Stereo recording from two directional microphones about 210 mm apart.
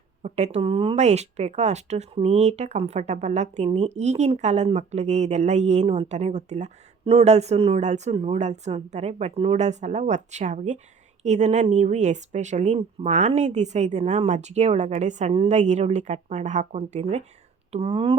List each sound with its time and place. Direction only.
0.2 s speech: 30° right (ahead or behind)